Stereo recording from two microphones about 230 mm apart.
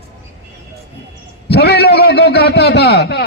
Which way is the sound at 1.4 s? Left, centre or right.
Left.